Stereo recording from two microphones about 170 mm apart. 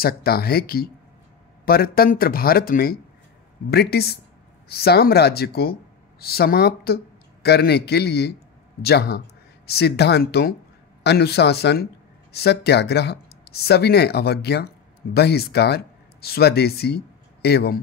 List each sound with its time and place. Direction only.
0.0 s speech: 65° left (ahead or behind)